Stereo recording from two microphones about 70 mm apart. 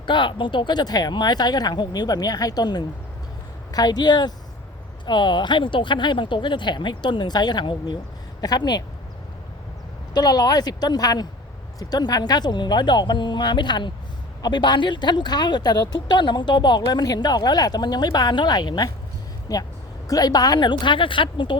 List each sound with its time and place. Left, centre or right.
0.1 s speech: left
8.4 s speech: left
10.2 s speech: left
19.5 s speech: left